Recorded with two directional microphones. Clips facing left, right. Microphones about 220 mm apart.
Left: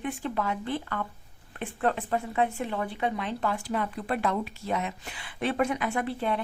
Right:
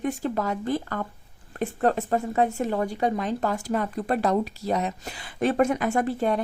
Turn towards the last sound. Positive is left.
turn(degrees=-45)  # may be behind; listen again after turning